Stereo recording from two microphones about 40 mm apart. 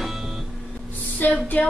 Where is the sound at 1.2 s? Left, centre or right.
Left.